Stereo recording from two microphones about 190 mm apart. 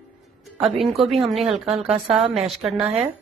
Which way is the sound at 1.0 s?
Centre (ahead or behind).